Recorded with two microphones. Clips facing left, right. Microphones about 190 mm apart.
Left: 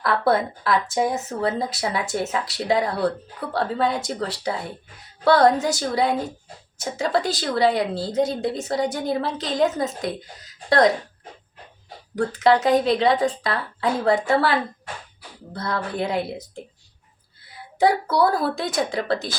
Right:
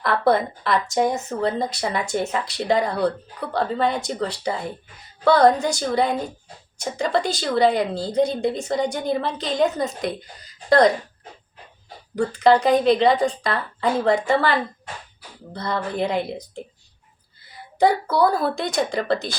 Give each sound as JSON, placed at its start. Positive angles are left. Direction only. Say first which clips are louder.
{"t": 0.0, "sound": "speech", "louder": "right 1 dB", "side_deg": 0}
{"t": 12.1, "sound": "a woman's voice", "louder": "right 2 dB", "side_deg": 0}